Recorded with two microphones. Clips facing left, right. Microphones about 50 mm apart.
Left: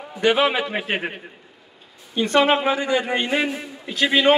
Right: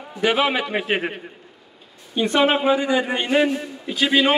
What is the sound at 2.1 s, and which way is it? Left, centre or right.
A man's voice, centre.